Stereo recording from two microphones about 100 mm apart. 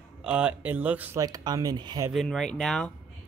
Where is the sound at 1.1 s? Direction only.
40° right (ahead or behind).